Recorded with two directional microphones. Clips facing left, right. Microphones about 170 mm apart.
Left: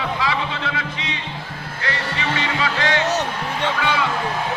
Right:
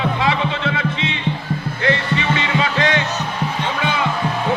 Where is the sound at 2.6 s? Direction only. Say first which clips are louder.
Even; 20° right (ahead or behind).